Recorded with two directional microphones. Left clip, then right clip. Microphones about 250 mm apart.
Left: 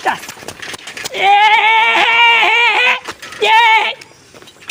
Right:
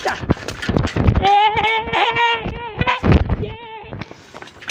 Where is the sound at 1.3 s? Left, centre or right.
Left.